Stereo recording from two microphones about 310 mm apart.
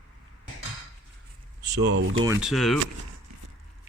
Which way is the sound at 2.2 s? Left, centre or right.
Centre.